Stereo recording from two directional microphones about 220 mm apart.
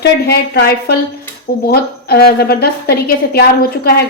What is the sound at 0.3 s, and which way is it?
A woman's voice, 50° left (ahead or behind).